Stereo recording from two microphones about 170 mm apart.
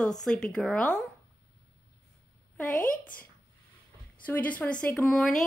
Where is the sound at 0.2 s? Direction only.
5° left (ahead or behind).